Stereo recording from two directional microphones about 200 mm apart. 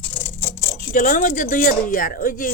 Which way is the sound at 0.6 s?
40° left (ahead or behind).